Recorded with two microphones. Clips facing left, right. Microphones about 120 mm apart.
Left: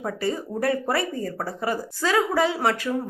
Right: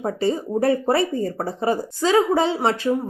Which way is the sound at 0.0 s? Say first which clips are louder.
Right 5 dB; 25° right (ahead or behind).